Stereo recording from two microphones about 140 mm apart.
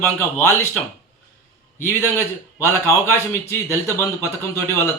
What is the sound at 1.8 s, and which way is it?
Speech, 15° left (ahead or behind).